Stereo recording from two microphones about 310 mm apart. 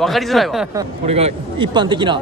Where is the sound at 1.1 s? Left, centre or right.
Centre.